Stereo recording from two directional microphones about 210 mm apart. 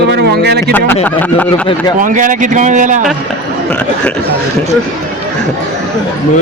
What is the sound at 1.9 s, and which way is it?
A man's voice, 40° right (ahead or behind).